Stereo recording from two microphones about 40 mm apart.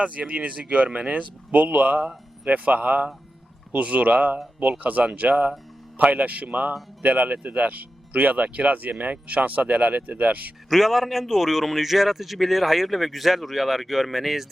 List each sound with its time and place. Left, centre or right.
0.0 s speech: right
10.7 s a man's voice: centre